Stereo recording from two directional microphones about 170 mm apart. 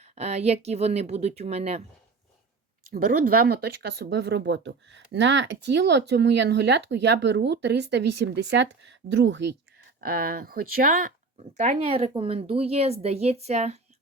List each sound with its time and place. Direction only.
0.0 s speech: 40° right (ahead or behind)
2.9 s speech: 60° right (ahead or behind); by 9.5 s 90° right
10.3 s speech: 60° right (ahead or behind)
11.3 s speech: 45° right (ahead or behind)